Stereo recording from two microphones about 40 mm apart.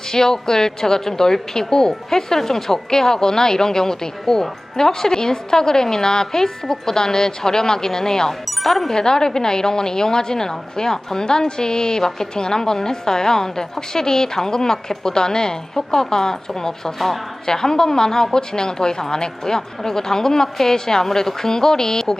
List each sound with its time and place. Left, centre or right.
0.1 s a woman's voice: centre
9.0 s a woman's voice: centre